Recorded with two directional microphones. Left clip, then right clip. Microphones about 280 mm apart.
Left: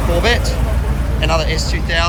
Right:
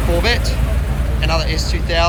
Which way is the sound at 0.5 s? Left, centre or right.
Left.